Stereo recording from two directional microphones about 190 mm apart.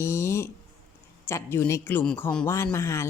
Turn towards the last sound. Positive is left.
turn(degrees=15)  # may be behind; listen again after turning